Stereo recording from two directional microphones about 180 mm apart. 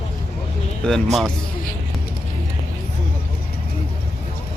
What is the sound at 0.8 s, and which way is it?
Speech, 5° left (ahead or behind).